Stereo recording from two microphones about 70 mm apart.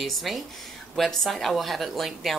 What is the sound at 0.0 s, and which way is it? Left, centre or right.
Speech, centre.